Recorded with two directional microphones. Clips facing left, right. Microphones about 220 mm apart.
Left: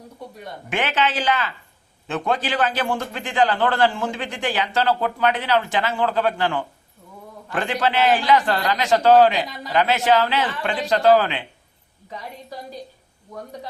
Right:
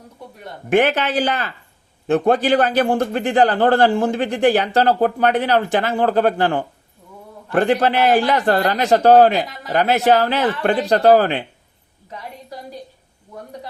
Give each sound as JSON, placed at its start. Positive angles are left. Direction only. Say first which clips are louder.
{"t": 0.7, "sound": "a man's voice", "louder": "right 8 dB", "side_deg": -55}
{"t": 1.2, "sound": "a man's voice", "louder": "right 2 dB", "side_deg": -45}
{"t": 2.0, "sound": "a man's voice", "louder": "right 9 dB", "side_deg": -55}
{"t": 2.6, "sound": "a man's voice", "louder": "right 6 dB", "side_deg": -40}
{"t": 8.4, "sound": "a man's voice", "louder": "right 5 dB", "side_deg": -55}
{"t": 8.8, "sound": "a man's voice", "louder": "right 2 dB", "side_deg": -40}
{"t": 11.1, "sound": "a man's voice", "louder": "right 3 dB", "side_deg": -45}